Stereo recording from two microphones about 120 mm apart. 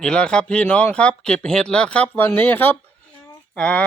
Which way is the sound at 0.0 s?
5° left (ahead or behind).